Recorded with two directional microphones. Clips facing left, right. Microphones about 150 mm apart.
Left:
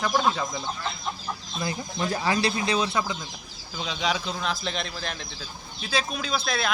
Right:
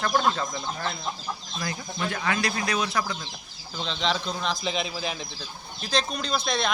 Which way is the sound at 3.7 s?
10° left (ahead or behind).